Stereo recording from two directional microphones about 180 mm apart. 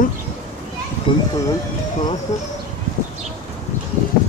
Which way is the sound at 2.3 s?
40° left (ahead or behind).